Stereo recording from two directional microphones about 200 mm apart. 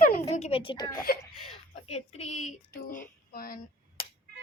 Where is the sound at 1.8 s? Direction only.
30° left (ahead or behind); by 3.6 s 45° left (ahead or behind).